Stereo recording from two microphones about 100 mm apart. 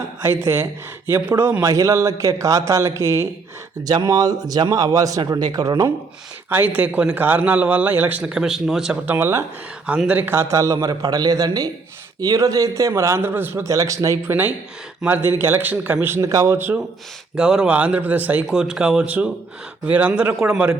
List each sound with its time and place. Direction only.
0.4 s a man's voice: 30° right (ahead or behind)
6.5 s a man's voice: 20° right (ahead or behind)
8.2 s speech: 5° right (ahead or behind)
9.0 s a man's voice: 20° right (ahead or behind)
13.7 s a man's voice: 35° right (ahead or behind)
15.0 s a man's voice: 20° right (ahead or behind)
17.3 s a man's voice: 10° right (ahead or behind)